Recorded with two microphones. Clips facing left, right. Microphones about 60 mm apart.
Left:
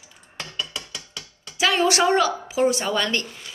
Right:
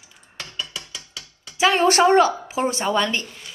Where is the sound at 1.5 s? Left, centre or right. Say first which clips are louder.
Right 3 dB; right.